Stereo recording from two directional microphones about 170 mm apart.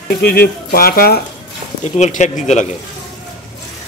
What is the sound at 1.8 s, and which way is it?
Speech, 45° left (ahead or behind).